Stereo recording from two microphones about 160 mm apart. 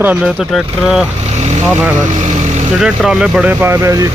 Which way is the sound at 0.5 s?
Centre (ahead or behind).